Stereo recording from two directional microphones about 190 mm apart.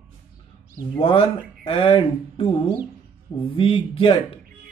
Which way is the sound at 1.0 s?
30° left (ahead or behind).